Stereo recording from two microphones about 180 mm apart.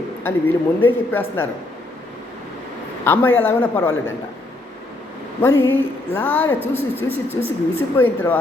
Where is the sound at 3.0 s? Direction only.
10° left (ahead or behind).